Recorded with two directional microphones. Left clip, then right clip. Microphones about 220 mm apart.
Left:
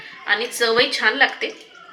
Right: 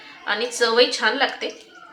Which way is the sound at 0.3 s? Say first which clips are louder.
Left 2 dB; 30° right (ahead or behind).